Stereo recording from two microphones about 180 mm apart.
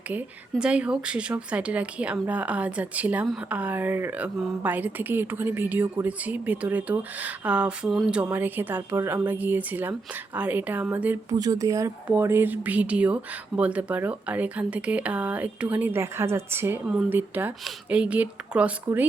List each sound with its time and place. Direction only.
0.5 s speech: 5° right (ahead or behind)